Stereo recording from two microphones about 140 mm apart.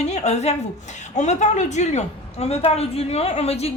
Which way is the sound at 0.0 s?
50° left (ahead or behind).